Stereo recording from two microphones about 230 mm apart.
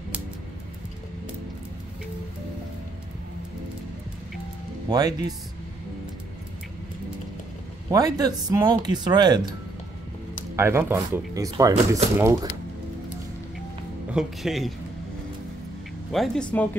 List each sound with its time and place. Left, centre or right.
4.8 s speech: centre
7.9 s speech: centre
10.5 s speech: centre
14.1 s speech: centre
16.1 s speech: centre